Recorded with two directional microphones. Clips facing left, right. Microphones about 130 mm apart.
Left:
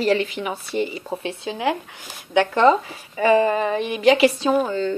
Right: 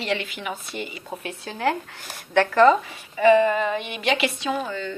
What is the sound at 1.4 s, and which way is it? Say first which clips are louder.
Speech: left 1 dB; 15° left (ahead or behind).